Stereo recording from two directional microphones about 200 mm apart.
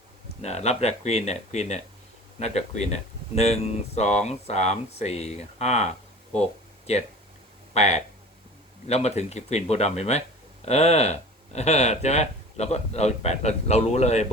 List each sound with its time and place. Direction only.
0.4 s speech: 35° left (ahead or behind)